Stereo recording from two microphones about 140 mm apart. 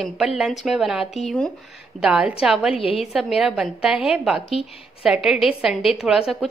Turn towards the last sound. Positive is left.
turn(degrees=0)  # may be behind; listen again after turning